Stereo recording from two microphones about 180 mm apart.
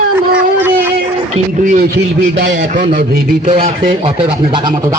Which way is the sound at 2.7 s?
50° right (ahead or behind).